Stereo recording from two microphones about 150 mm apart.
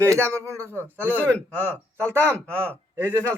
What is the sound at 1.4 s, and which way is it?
Speech, 10° left (ahead or behind).